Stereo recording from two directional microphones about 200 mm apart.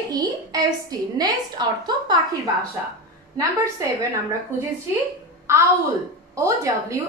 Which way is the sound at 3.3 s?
15° right (ahead or behind).